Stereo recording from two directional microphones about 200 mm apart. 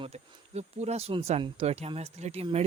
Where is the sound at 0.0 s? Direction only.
35° right (ahead or behind).